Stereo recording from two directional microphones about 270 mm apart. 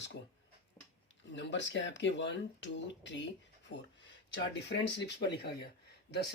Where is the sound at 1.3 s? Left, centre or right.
Left.